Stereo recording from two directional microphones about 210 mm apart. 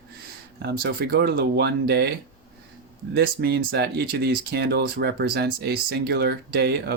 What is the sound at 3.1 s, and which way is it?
Speech, 50° right (ahead or behind).